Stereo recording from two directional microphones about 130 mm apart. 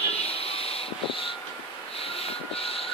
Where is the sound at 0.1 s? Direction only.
50° left (ahead or behind).